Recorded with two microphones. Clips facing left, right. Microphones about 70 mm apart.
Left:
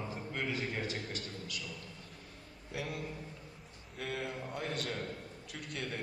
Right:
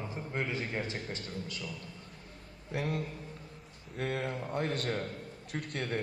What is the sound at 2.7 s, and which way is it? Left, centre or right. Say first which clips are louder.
A man's voice: right 5 dB; right.